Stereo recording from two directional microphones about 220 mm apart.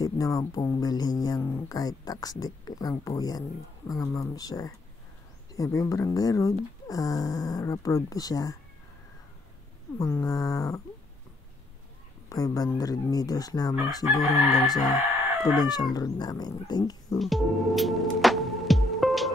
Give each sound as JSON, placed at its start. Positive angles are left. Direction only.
{"t": 0.0, "sound": "speech", "side_deg": 15}
{"t": 9.9, "sound": "speech", "side_deg": 15}
{"t": 12.3, "sound": "speech", "side_deg": 15}
{"t": 14.2, "sound": "chicken", "side_deg": 0}
{"t": 15.6, "sound": "speech", "side_deg": 20}
{"t": 17.2, "sound": "music", "side_deg": 0}